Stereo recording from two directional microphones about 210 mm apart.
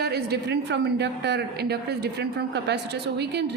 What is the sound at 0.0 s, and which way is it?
A woman's voice, 50° right (ahead or behind).